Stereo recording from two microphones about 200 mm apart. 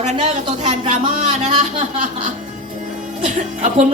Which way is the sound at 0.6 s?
35° right (ahead or behind).